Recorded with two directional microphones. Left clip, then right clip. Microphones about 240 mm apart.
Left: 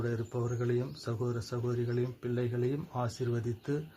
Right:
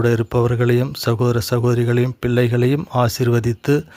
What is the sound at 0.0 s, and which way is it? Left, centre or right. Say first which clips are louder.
Speech: right 18 dB; right.